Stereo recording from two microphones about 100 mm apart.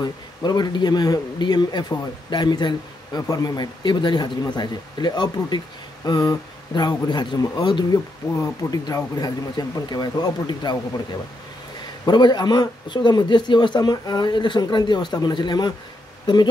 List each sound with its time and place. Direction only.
0.0 s speech: 45° left (ahead or behind)
12.1 s speech: 45° left (ahead or behind)